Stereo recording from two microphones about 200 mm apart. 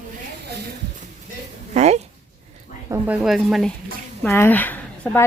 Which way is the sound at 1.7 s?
35° right (ahead or behind).